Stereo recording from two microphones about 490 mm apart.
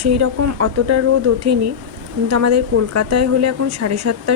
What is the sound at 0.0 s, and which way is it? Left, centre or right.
A woman's voice, right.